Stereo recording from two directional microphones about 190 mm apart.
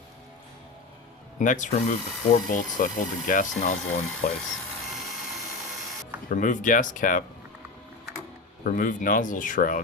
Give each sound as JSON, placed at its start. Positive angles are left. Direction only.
{"t": 1.4, "sound": "speech", "side_deg": 40}
{"t": 6.2, "sound": "speech", "side_deg": 40}
{"t": 8.6, "sound": "speech", "side_deg": 45}